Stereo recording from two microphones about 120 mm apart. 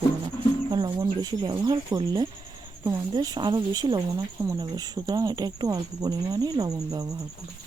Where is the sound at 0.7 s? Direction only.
40° right (ahead or behind).